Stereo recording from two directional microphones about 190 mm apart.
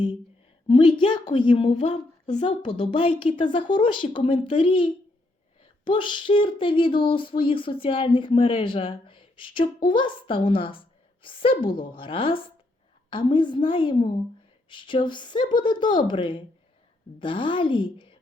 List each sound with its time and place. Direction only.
0.7 s speech: 25° left (ahead or behind)